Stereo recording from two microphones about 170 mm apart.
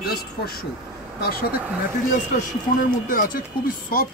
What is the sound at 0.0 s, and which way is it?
Speech, 65° left (ahead or behind).